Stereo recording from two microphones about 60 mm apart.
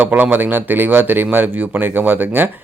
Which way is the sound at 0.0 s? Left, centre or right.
Right.